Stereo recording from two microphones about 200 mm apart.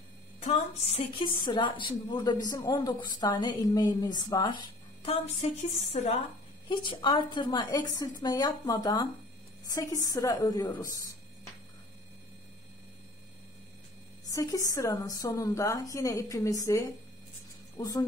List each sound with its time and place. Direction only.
0.4 s a woman's voice: 35° left (ahead or behind); by 11.1 s 20° left (ahead or behind)
14.3 s a woman's voice: 15° left (ahead or behind)